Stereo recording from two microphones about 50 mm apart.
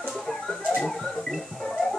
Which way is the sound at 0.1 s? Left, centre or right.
Centre.